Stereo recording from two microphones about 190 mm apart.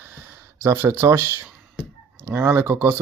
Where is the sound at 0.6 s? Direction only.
10° right (ahead or behind).